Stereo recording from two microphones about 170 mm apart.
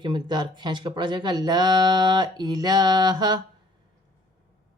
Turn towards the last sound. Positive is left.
turn(degrees=-25)  # may be behind; listen again after turning